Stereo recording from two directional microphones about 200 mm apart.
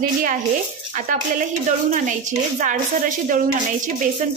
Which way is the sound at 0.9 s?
40° right (ahead or behind).